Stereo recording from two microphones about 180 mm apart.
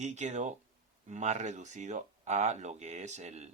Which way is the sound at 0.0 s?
40° right (ahead or behind).